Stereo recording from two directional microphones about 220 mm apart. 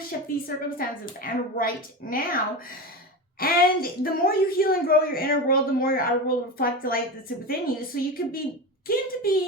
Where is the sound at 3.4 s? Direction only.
40° left (ahead or behind).